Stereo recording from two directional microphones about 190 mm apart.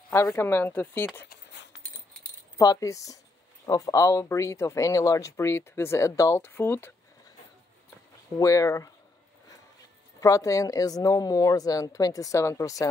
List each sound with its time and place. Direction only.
0.1 s speech: 15° left (ahead or behind)
1.2 s cutlery: 65° left (ahead or behind)
2.5 s speech: 20° left (ahead or behind)
8.4 s speech: 15° left (ahead or behind)
10.2 s speech: 15° left (ahead or behind)